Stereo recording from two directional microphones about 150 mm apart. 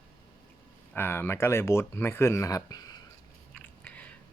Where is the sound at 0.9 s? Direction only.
15° left (ahead or behind).